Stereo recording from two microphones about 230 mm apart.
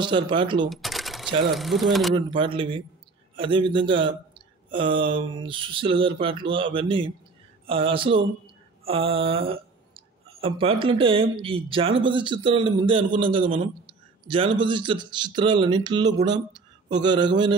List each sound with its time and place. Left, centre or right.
0.0 s a man's voice: right
0.7 s a sound: centre
1.5 s speech: centre
2.1 s a man's voice: right